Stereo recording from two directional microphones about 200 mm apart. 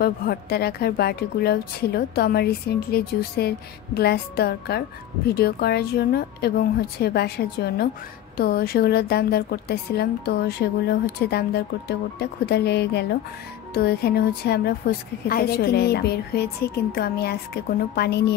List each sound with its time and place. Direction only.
0.0 s a woman's voice: 50° left (ahead or behind)